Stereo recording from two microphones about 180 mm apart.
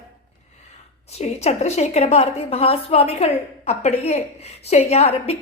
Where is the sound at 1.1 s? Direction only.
35° left (ahead or behind).